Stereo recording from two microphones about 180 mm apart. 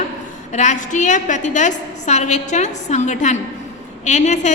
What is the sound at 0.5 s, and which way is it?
A woman's voice, 40° left (ahead or behind).